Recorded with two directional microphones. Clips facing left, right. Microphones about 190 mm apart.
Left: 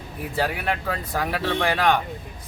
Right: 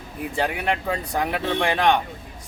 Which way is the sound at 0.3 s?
20° right (ahead or behind).